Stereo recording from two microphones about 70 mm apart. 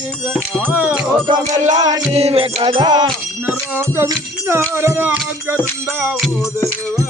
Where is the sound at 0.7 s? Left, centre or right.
Right.